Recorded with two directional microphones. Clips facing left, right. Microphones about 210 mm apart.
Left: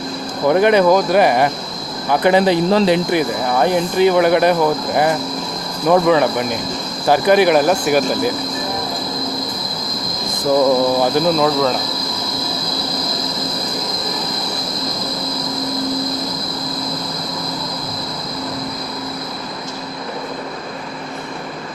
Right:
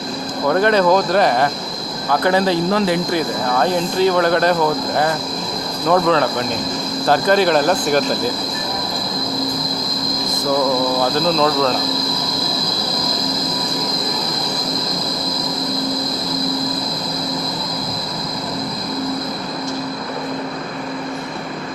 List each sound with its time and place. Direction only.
0.4 s speech: 15° left (ahead or behind)
5.9 s speech: 10° left (ahead or behind)
11.0 s speech: 5° left (ahead or behind)